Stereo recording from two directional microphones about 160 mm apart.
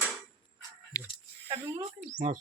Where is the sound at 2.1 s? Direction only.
55° right (ahead or behind).